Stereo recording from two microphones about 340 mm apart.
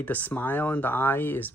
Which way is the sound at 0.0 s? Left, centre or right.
Centre.